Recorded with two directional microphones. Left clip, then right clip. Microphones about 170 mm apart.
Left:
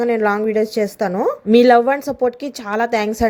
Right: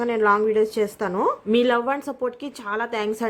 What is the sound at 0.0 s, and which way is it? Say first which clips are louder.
A woman's voice: left 2 dB; 15° left (ahead or behind).